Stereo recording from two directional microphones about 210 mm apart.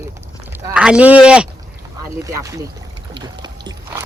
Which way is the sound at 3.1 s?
20° right (ahead or behind).